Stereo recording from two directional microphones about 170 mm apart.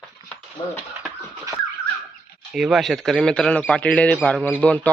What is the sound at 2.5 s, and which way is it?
Speech, centre (ahead or behind).